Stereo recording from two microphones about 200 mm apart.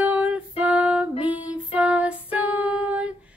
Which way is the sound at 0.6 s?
5° right (ahead or behind).